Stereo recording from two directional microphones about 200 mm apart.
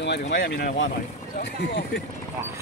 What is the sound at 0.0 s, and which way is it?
Speech, 55° left (ahead or behind).